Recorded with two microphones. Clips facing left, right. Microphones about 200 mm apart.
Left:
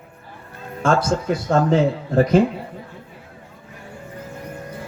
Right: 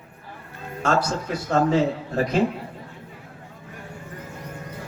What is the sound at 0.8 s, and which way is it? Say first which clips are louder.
Speech: left 4 dB; 50° left (ahead or behind).